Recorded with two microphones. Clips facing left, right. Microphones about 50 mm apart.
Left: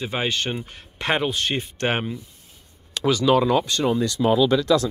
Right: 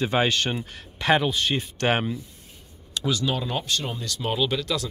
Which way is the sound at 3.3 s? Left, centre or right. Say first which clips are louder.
Left 10 dB; left.